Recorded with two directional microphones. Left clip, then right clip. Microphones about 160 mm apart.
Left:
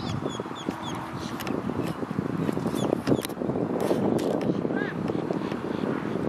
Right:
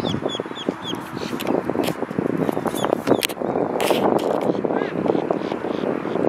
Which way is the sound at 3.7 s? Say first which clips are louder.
Right 7 dB; 40° right (ahead or behind).